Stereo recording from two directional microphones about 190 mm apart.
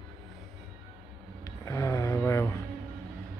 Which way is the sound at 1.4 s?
20° left (ahead or behind).